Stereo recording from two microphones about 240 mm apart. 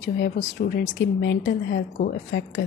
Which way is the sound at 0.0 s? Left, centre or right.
Left.